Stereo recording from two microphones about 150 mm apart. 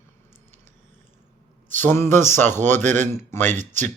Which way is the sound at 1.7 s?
15° left (ahead or behind).